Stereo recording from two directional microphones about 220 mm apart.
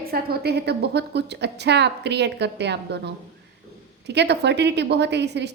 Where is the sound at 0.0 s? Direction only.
45° right (ahead or behind).